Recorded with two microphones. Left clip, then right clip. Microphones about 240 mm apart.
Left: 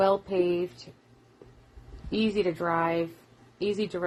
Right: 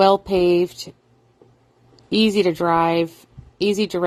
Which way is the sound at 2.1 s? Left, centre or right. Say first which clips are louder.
Right 9 dB; right.